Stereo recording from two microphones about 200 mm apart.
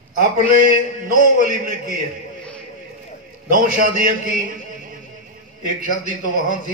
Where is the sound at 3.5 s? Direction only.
45° right (ahead or behind).